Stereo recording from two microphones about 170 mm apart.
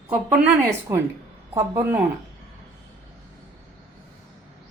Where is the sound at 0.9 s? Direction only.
15° right (ahead or behind).